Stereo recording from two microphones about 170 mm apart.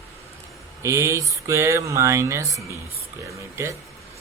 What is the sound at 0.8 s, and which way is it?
Speech, 15° right (ahead or behind).